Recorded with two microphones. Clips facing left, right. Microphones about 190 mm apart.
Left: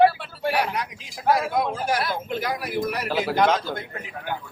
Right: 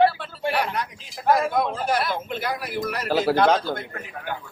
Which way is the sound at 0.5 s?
10° left (ahead or behind).